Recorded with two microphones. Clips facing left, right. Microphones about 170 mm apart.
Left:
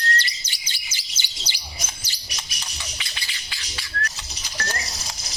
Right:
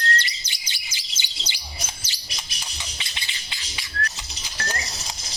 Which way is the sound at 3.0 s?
25° right (ahead or behind).